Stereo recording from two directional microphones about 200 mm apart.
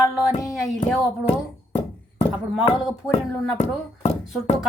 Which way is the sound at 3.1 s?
30° left (ahead or behind).